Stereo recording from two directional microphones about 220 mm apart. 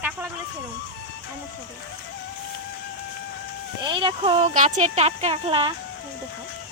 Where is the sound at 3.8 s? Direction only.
20° right (ahead or behind).